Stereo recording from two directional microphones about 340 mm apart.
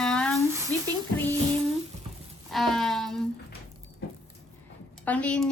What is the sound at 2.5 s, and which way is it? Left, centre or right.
Speech, centre.